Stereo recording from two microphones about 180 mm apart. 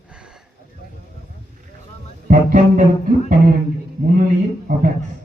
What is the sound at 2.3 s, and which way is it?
Music, 45° right (ahead or behind).